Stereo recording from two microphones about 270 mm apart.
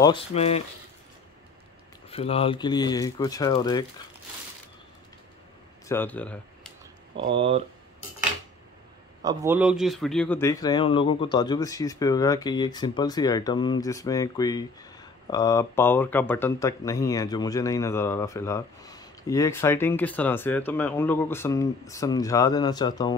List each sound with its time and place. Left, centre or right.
0.0 s speech: left
2.0 s speech: left
5.9 s speech: centre
7.2 s speech: centre
9.2 s speech: centre